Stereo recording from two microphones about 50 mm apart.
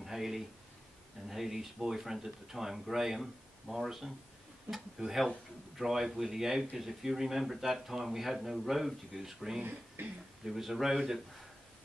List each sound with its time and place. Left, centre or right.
0.0 s a sound: centre
1.3 s speech: centre
9.6 s speech: right
10.4 s speech: centre